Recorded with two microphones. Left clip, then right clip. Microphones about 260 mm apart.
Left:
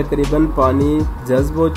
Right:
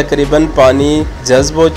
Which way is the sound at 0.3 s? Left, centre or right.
Right.